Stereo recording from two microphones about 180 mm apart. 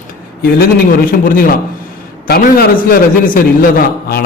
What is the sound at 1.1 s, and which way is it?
A man's voice, 50° left (ahead or behind).